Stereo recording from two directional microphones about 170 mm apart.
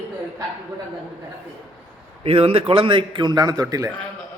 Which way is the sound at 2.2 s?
35° right (ahead or behind).